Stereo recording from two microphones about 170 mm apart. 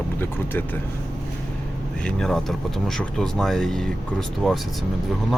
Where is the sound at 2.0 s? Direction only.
5° left (ahead or behind).